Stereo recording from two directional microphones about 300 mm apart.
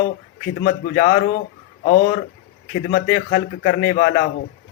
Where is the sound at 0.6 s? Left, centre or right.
Left.